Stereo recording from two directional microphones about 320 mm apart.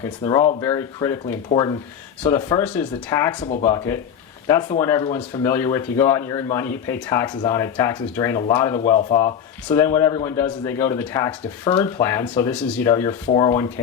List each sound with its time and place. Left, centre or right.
0.0 s a man's voice: centre